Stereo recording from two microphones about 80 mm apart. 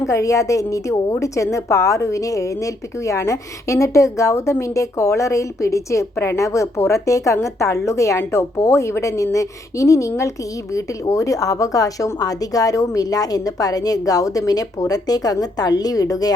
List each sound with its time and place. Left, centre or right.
0.1 s a woman's voice: left